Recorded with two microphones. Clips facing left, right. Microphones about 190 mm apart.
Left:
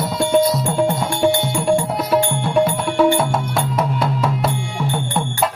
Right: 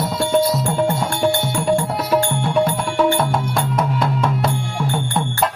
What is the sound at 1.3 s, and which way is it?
Music, 15° left (ahead or behind).